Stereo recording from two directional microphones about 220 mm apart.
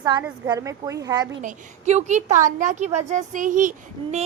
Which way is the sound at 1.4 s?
30° right (ahead or behind).